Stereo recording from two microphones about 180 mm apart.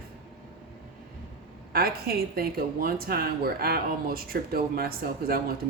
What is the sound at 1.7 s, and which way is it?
Speech, 55° right (ahead or behind).